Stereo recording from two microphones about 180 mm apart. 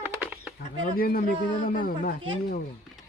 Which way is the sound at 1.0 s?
55° left (ahead or behind).